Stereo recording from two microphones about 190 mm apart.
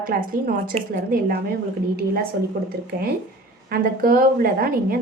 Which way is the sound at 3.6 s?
50° right (ahead or behind).